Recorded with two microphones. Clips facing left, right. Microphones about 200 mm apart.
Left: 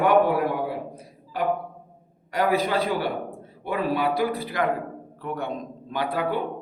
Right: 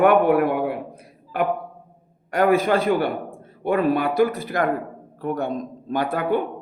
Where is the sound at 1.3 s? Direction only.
55° right (ahead or behind).